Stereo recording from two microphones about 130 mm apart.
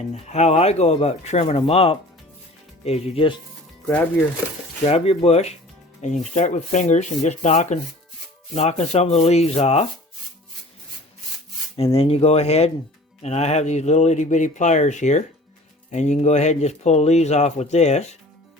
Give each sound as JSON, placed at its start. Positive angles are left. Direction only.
{"t": 0.0, "sound": "speech", "side_deg": 60}
{"t": 3.8, "sound": "speech", "side_deg": 15}
{"t": 4.9, "sound": "speech", "side_deg": 50}
{"t": 6.3, "sound": "speech", "side_deg": 65}
{"t": 8.5, "sound": "speech", "side_deg": 55}
{"t": 11.8, "sound": "speech", "side_deg": 50}